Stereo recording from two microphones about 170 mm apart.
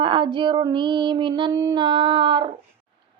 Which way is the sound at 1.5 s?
15° right (ahead or behind).